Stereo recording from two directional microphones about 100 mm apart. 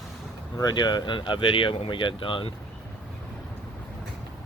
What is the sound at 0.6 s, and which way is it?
Speech, 45° left (ahead or behind).